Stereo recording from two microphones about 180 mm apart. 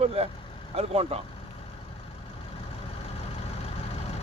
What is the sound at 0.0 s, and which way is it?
Speech, 35° right (ahead or behind).